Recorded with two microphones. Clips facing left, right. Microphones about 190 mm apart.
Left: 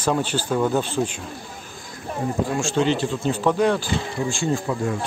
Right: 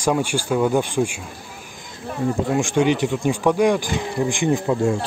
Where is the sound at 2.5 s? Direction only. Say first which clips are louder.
Right 3 dB; 15° right (ahead or behind).